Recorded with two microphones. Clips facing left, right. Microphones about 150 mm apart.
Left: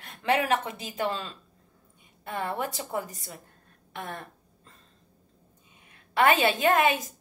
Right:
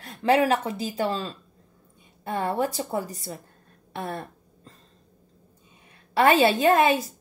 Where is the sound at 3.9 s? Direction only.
35° right (ahead or behind).